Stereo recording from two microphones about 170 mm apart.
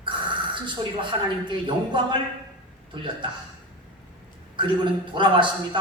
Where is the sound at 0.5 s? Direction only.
30° right (ahead or behind).